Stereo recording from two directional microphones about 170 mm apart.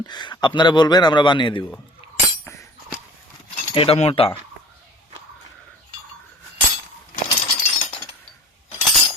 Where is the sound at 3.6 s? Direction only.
35° left (ahead or behind).